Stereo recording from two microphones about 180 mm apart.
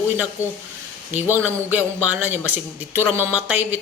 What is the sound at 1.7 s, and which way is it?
A man's voice, 10° right (ahead or behind).